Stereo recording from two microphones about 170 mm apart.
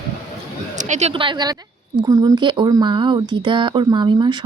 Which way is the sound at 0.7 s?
45° right (ahead or behind).